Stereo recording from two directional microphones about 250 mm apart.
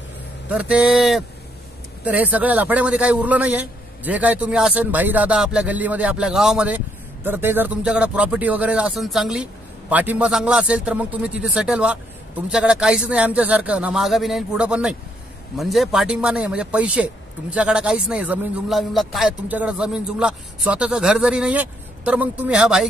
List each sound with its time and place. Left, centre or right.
0.5 s a man's voice: centre